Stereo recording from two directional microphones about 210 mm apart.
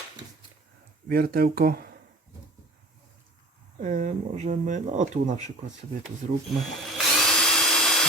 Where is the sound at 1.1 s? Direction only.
45° right (ahead or behind).